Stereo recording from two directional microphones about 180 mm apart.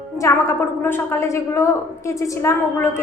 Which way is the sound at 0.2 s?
15° left (ahead or behind).